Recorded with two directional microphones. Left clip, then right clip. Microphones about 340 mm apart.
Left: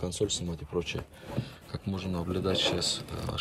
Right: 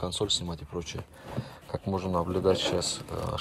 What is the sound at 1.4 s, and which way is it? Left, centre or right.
A man's voice, centre.